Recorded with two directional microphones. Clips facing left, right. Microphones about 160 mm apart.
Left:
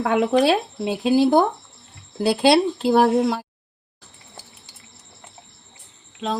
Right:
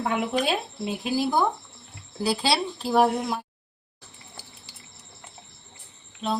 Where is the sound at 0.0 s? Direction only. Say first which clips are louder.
Left 8 dB; 90° left.